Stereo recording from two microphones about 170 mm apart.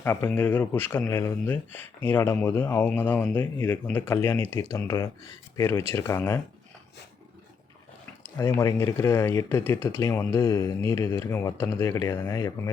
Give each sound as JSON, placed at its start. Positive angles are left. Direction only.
{"t": 0.0, "sound": "speech", "side_deg": 15}
{"t": 8.4, "sound": "speech", "side_deg": 15}